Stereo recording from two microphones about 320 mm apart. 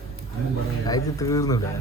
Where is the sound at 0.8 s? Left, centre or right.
Centre.